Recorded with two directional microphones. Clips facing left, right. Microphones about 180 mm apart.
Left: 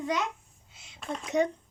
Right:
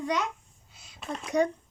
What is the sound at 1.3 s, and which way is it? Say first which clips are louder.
Speech: right 1 dB; 20° left (ahead or behind).